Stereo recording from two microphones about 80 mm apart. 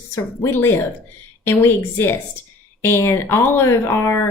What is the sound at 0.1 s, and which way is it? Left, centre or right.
A woman's voice, left.